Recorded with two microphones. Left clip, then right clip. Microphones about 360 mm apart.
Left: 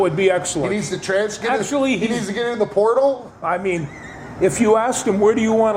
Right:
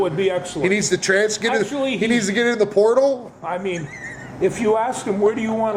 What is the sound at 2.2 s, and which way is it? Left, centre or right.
Speech, right.